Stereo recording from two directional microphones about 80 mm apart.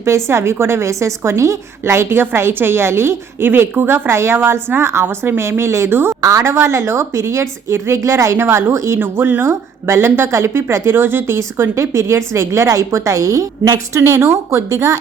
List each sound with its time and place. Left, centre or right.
0.0 s speech: right